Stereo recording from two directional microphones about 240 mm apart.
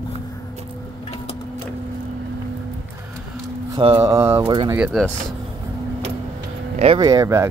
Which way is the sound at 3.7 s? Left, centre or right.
Right.